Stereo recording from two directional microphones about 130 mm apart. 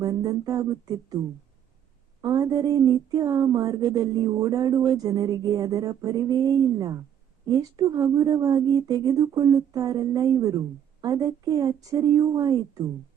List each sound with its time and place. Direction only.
0.0 s speech: 30° right (ahead or behind)
2.2 s speech: 30° right (ahead or behind)